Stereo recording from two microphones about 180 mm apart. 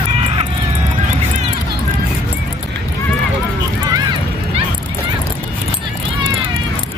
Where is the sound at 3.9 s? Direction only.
25° right (ahead or behind).